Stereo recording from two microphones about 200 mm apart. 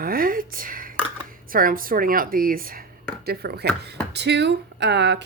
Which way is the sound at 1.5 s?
45° right (ahead or behind).